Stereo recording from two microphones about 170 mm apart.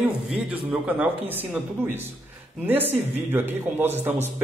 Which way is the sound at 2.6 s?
10° right (ahead or behind).